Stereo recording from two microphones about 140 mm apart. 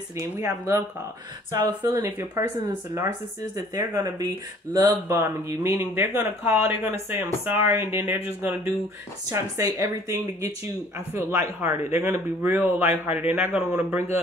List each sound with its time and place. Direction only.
0.1 s speech: 20° right (ahead or behind)
2.0 s speech: 20° right (ahead or behind)